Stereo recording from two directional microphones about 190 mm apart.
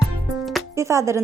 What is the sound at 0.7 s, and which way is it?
Speech, 15° right (ahead or behind).